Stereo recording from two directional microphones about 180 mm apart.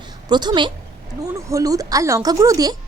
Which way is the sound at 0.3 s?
25° right (ahead or behind).